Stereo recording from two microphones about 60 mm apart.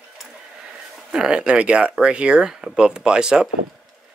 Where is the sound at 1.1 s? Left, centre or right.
Centre.